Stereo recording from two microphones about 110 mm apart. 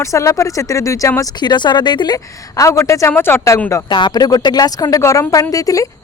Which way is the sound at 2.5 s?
30° left (ahead or behind).